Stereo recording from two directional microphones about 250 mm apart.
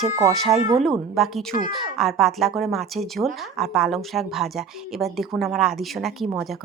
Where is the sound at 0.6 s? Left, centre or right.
Right.